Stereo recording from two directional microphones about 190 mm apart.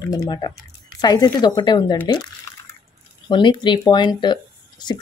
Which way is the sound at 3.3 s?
25° left (ahead or behind).